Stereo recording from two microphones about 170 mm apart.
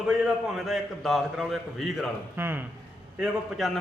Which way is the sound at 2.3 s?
10° right (ahead or behind).